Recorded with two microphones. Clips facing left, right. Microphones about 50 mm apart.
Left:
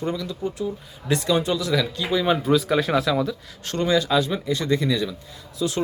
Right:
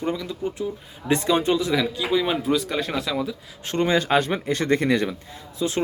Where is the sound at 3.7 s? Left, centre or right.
Right.